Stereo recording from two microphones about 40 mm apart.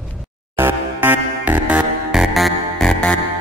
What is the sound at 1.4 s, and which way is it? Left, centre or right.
Music, right.